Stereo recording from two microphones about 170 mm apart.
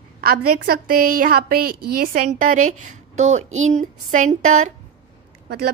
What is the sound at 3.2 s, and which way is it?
A woman's voice, 45° right (ahead or behind).